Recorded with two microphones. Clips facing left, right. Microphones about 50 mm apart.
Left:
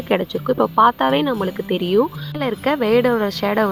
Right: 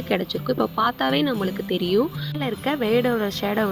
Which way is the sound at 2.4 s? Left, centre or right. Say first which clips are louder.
Left 5 dB; left.